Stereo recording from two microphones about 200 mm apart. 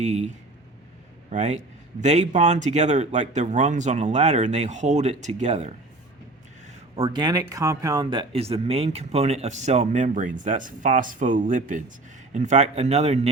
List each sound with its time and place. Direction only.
0.0 s speech: 35° right (ahead or behind)
6.9 s speech: 25° right (ahead or behind)